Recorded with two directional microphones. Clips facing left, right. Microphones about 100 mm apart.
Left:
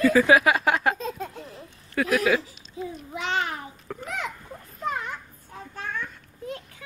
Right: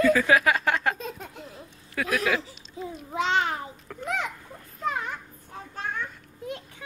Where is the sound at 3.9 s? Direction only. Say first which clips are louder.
Left 6 dB; 10° left (ahead or behind).